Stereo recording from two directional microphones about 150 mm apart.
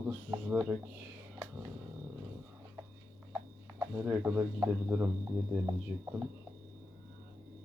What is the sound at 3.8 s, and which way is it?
Speech, 15° right (ahead or behind).